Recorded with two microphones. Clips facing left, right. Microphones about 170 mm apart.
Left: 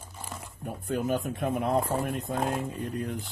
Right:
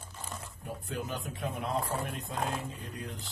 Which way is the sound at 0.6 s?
50° left (ahead or behind).